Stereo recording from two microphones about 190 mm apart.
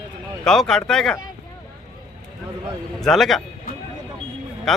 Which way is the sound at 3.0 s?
Centre (ahead or behind).